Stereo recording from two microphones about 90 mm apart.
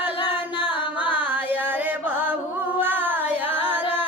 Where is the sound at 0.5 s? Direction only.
60° left (ahead or behind).